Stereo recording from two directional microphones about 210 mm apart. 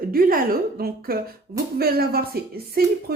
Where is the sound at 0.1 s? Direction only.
45° right (ahead or behind).